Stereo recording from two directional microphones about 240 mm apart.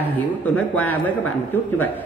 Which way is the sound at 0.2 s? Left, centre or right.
Centre.